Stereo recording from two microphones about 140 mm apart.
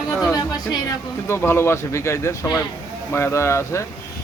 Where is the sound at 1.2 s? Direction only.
20° left (ahead or behind).